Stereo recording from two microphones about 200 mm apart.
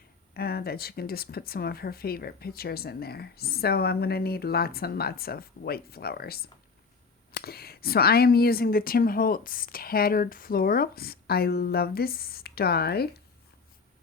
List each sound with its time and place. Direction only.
0.3 s speech: 50° left (ahead or behind)